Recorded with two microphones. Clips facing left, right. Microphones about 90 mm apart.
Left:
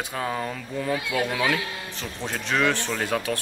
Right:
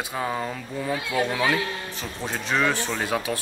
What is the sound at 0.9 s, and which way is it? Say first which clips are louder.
Speech: right 2 dB; 30° right (ahead or behind).